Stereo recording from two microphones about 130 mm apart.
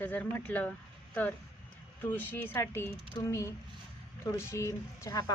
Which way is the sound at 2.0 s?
15° left (ahead or behind).